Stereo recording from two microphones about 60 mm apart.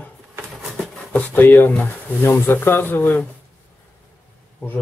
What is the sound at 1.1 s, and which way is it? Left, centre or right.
Speech, left.